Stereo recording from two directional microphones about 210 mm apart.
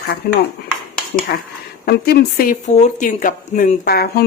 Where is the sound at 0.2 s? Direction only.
45° left (ahead or behind).